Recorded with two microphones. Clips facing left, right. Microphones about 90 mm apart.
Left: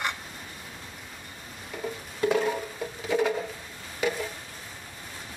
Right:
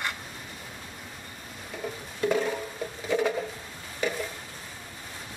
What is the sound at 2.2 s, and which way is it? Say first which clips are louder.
Music: left 1 dB; 5° left (ahead or behind).